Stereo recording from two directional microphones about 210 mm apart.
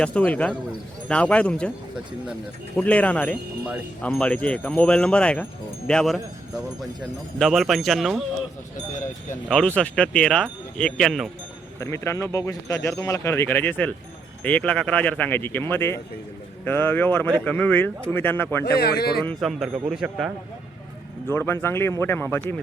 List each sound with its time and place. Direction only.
0.0 s speech: 5° left (ahead or behind)
2.7 s speech: 5° left (ahead or behind)
9.5 s speech: 5° left (ahead or behind)
11.8 s speech: 15° left (ahead or behind)
18.6 s speech: 50° left (ahead or behind)
19.2 s speech: 5° left (ahead or behind)
21.2 s speech: 10° left (ahead or behind)